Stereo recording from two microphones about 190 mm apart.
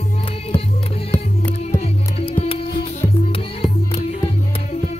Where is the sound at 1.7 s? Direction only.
30° left (ahead or behind).